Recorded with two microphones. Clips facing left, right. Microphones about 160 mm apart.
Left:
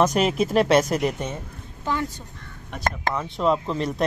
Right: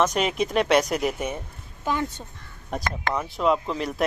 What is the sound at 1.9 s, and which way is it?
Speech, 20° right (ahead or behind).